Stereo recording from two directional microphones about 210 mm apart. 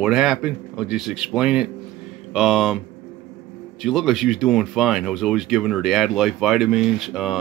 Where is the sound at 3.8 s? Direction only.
Centre (ahead or behind).